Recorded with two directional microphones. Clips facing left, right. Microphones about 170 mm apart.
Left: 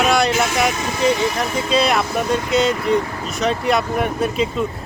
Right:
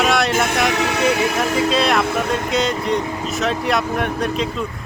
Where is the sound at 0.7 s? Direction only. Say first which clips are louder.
Right 1 dB; 75° right (ahead or behind).